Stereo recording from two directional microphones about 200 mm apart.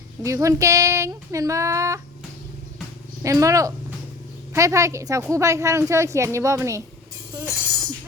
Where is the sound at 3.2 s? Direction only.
15° right (ahead or behind).